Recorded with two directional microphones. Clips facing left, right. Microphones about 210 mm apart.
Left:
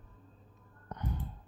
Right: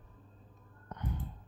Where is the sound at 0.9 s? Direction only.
40° left (ahead or behind).